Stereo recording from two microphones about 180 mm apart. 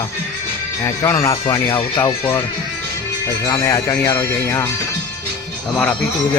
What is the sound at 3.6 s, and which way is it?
Speech, 15° left (ahead or behind).